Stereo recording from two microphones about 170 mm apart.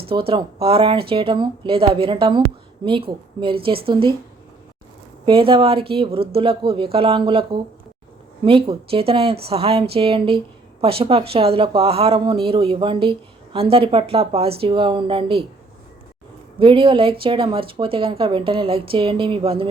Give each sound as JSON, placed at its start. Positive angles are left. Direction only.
{"t": 0.0, "sound": "speech", "side_deg": -30}
{"t": 5.2, "sound": "speech", "side_deg": -30}
{"t": 16.6, "sound": "speech", "side_deg": -30}